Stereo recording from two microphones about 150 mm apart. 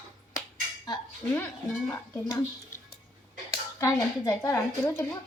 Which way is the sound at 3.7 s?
20° left (ahead or behind).